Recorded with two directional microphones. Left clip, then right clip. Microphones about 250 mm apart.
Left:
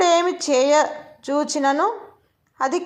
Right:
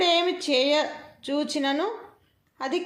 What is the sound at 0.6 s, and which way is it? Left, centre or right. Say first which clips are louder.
A woman's voice: left 6 dB; centre.